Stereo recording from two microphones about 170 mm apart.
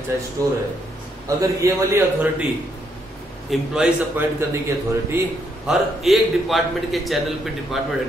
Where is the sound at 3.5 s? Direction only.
Centre (ahead or behind).